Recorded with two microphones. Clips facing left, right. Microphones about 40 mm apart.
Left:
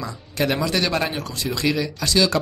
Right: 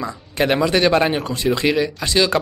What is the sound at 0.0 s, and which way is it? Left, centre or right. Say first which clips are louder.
Speech: right 3 dB; right.